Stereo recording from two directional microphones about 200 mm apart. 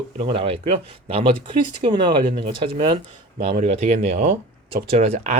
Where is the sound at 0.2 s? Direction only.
30° right (ahead or behind).